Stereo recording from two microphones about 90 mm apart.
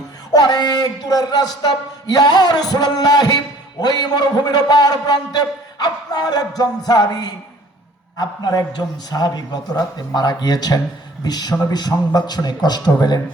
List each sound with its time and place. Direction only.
0.3 s speech: 50° left (ahead or behind)